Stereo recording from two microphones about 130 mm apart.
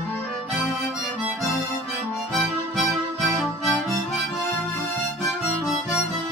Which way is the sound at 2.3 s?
Centre (ahead or behind).